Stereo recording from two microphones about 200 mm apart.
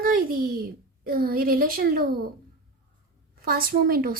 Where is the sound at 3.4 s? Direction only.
45° right (ahead or behind).